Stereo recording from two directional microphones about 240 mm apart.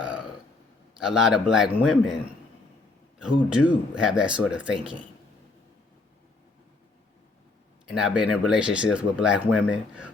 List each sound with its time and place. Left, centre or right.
0.9 s speech: centre
3.5 s speech: centre
7.9 s speech: centre